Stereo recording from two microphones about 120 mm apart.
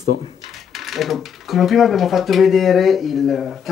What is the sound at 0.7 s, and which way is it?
Speech, centre (ahead or behind).